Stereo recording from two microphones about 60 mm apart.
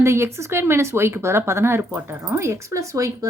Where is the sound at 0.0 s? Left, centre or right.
Right.